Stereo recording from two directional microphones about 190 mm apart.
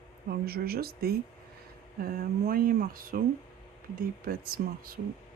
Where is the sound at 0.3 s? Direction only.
55° right (ahead or behind).